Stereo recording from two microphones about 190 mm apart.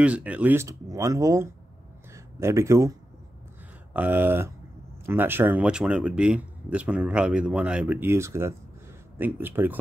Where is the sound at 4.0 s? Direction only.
10° right (ahead or behind).